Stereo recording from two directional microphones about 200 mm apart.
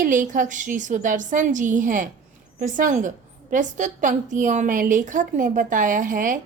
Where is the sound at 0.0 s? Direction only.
40° right (ahead or behind).